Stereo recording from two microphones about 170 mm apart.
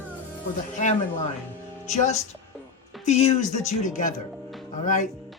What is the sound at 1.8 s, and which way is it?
Speech, 45° left (ahead or behind).